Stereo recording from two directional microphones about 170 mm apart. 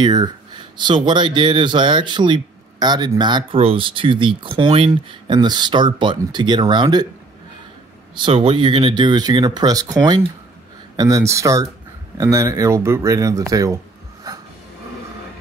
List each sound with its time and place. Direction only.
0.0 s speech: 25° right (ahead or behind)
8.1 s speech: 30° right (ahead or behind)
14.3 s a sound: 20° right (ahead or behind)